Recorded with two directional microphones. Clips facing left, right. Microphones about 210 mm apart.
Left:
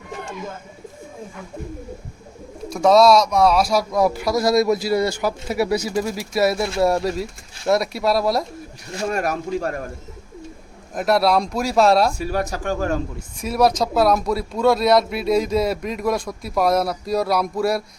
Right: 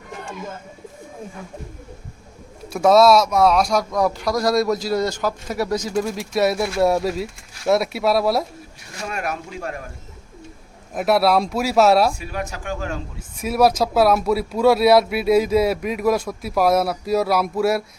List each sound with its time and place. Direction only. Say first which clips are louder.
2.6 s speech: even; 5° right (ahead or behind)
9.0 s speech: left 5 dB; 40° left (ahead or behind)
10.9 s speech: right 1 dB; 5° right (ahead or behind)
12.2 s speech: left 5 dB; 40° left (ahead or behind)
13.4 s speech: right 1 dB; 5° right (ahead or behind)